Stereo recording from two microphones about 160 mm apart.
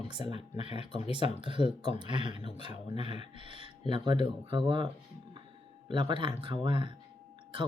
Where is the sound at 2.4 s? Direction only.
30° right (ahead or behind).